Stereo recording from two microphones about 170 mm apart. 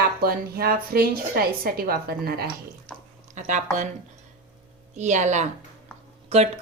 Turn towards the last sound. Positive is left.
turn(degrees=-40)  # may be behind; listen again after turning